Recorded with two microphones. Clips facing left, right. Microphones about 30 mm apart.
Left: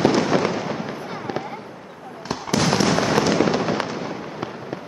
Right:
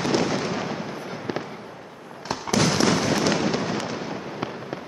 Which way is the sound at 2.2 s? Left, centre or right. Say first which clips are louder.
Left 1 dB; centre.